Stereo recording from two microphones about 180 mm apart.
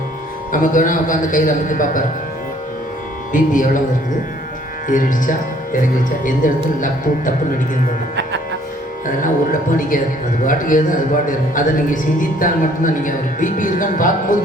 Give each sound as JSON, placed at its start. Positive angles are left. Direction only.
{"t": 0.5, "sound": "speech", "side_deg": 45}
{"t": 3.3, "sound": "speech", "side_deg": 45}
{"t": 4.9, "sound": "speech", "side_deg": 45}
{"t": 9.0, "sound": "speech", "side_deg": 45}